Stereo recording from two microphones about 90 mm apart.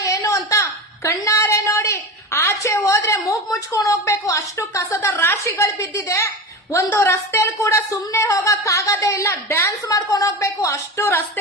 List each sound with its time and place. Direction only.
0.0 s a woman's voice: 35° left (ahead or behind)
9.9 s speech: 40° left (ahead or behind)